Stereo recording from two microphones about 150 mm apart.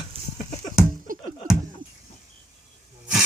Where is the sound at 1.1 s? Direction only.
65° right (ahead or behind).